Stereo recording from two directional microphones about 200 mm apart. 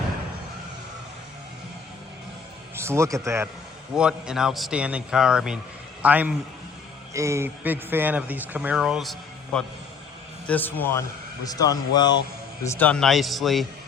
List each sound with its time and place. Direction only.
2.7 s a man's voice: 15° right (ahead or behind); by 12.2 s 20° left (ahead or behind)
12.6 s a man's voice: 10° left (ahead or behind)